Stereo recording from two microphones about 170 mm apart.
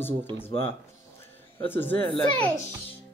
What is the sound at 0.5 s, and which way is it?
Speech, 35° left (ahead or behind).